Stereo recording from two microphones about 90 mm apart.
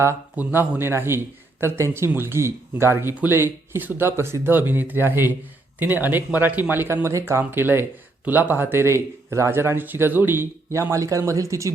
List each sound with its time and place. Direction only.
0.3 s speech: 25° right (ahead or behind)